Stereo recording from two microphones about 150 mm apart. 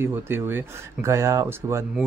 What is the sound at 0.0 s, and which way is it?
Speech, 15° right (ahead or behind).